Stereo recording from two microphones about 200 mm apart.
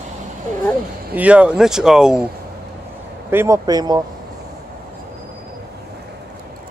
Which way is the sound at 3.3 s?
15° right (ahead or behind).